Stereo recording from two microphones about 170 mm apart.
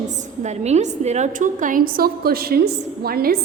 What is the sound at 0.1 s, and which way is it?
A woman's voice, 40° right (ahead or behind).